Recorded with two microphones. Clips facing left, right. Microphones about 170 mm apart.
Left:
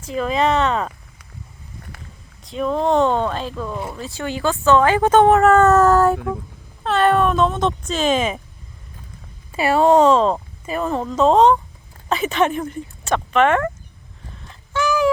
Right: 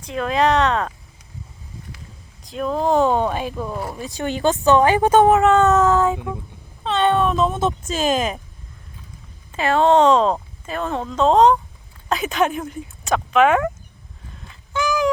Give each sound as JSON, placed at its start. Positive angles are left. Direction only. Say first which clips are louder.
{"t": 0.0, "sound": "speech", "louder": "even", "side_deg": 0}
{"t": 2.4, "sound": "speech", "louder": "left 1 dB", "side_deg": 0}
{"t": 3.2, "sound": "speech", "louder": "right 1 dB", "side_deg": -15}
{"t": 3.8, "sound": "speech", "louder": "even", "side_deg": 0}
{"t": 4.0, "sound": "speech", "louder": "right 3 dB", "side_deg": -20}
{"t": 6.1, "sound": "speech", "louder": "left 4 dB", "side_deg": -15}
{"t": 6.8, "sound": "speech", "louder": "left 2 dB", "side_deg": 0}
{"t": 9.5, "sound": "speech", "louder": "left 1 dB", "side_deg": 10}
{"t": 14.3, "sound": "a sound", "louder": "left 1 dB", "side_deg": 0}